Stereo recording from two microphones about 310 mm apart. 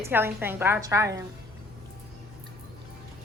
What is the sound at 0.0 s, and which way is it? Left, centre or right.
A woman's voice, centre.